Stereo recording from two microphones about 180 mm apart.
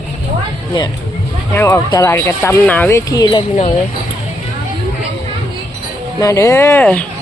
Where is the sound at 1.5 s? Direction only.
15° left (ahead or behind).